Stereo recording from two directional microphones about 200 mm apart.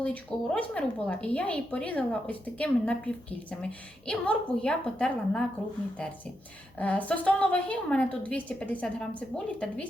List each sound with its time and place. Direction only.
0.0 s a woman's voice: 5° left (ahead or behind)
6.7 s a woman's voice: 5° left (ahead or behind)